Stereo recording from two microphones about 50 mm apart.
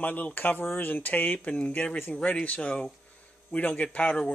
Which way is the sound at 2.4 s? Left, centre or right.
Left.